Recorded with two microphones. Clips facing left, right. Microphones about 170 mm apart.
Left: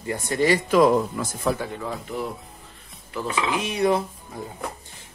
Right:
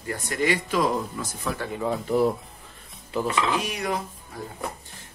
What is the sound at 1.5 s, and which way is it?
Speech, 35° left (ahead or behind).